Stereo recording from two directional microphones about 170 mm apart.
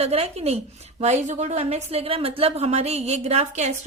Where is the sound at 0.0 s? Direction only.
35° right (ahead or behind).